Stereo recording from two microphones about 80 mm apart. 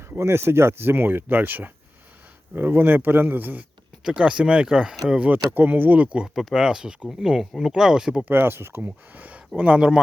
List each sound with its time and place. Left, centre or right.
0.1 s speech: right
4.0 s speech: centre
5.5 s speech: right
6.2 s speech: centre
8.2 s speech: right; by 10.0 s centre